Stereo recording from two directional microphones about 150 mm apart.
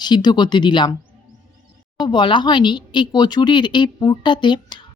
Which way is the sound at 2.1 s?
30° left (ahead or behind).